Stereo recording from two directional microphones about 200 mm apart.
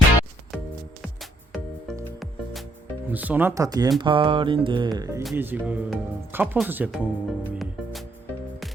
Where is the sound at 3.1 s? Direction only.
10° right (ahead or behind).